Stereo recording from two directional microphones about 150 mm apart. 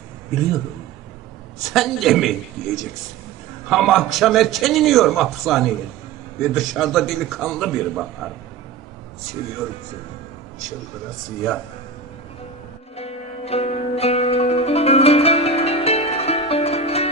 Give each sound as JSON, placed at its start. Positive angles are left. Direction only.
{"t": 1.5, "sound": "a man's voice", "side_deg": 0}
{"t": 13.0, "sound": "zither", "side_deg": 45}